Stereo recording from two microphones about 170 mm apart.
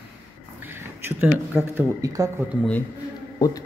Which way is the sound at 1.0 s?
10° right (ahead or behind).